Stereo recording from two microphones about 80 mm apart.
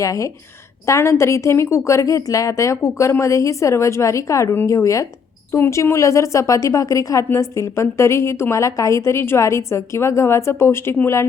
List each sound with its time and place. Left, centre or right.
0.0 s a woman's voice: left